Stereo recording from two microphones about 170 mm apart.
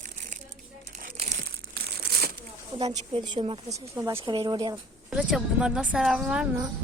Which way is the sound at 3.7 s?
20° right (ahead or behind).